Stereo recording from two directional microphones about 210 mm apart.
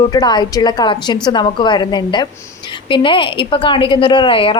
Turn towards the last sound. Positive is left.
turn(degrees=25)  # may be behind; listen again after turning